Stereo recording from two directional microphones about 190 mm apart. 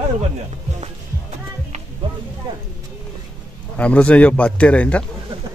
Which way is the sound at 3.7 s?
5° left (ahead or behind).